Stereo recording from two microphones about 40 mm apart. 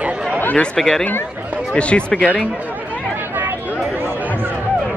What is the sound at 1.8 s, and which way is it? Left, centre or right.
Speech, left.